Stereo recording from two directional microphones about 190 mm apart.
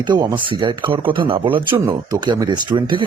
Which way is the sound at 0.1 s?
20° right (ahead or behind).